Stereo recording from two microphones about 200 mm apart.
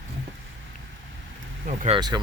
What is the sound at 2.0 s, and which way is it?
Speech, 20° right (ahead or behind).